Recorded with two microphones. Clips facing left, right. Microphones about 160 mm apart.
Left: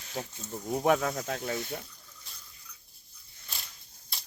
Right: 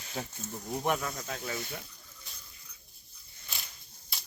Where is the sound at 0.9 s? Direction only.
90° left; by 1.4 s 60° left (ahead or behind).